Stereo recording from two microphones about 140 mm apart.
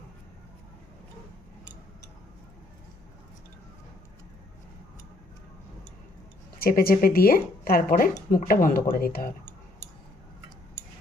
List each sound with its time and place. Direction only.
6.6 s speech: 90° left